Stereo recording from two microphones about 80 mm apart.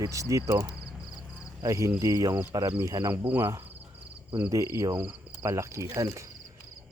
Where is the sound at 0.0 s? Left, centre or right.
Right.